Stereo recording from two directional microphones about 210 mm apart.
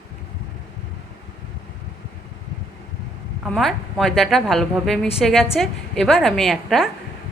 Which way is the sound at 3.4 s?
Centre (ahead or behind).